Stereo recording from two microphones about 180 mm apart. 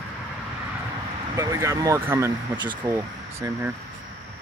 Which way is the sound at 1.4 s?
15° right (ahead or behind).